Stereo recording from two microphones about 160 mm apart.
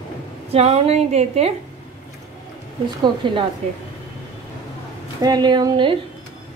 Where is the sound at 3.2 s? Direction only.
30° right (ahead or behind).